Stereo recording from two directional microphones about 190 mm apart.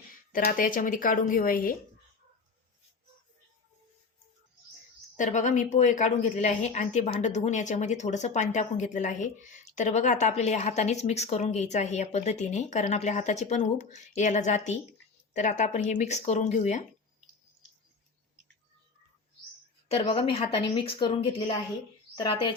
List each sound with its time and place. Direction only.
0.3 s speech: 45° left (ahead or behind)
5.1 s a woman's voice: 40° left (ahead or behind)
19.9 s speech: 30° left (ahead or behind)